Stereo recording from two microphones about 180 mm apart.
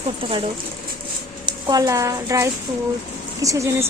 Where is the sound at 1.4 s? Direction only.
20° right (ahead or behind).